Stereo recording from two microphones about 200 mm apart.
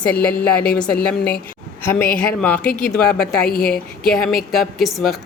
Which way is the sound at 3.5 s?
45° left (ahead or behind).